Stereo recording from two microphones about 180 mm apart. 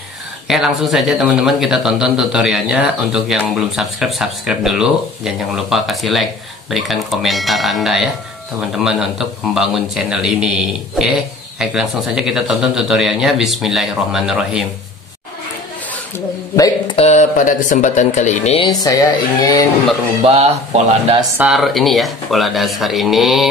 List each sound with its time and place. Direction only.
0.5 s a man's voice: centre (ahead or behind)
11.5 s a man's voice: centre (ahead or behind)
16.5 s speech: 20° left (ahead or behind)
16.9 s speech: 40° left (ahead or behind)
18.7 s speech: 20° left (ahead or behind)
20.2 s speech: 35° right (ahead or behind)
21.4 s a man's voice: centre (ahead or behind)